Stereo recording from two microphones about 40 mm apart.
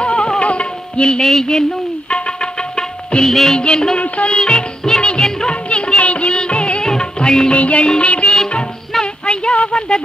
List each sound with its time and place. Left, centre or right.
0.0 s music: left
1.2 s a sound: centre
2.0 s tabla: left
3.3 s music: centre
3.5 s music: left
7.5 s music: left
9.0 s a sound: left